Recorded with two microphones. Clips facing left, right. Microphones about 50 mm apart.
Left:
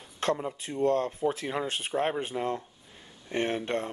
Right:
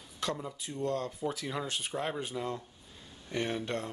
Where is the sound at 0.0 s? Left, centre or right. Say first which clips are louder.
Left 7 dB; left.